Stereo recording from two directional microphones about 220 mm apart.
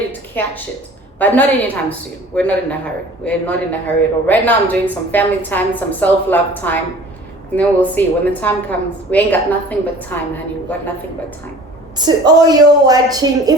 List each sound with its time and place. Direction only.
0.4 s speech: 10° left (ahead or behind)
11.9 s a woman's voice: 20° right (ahead or behind)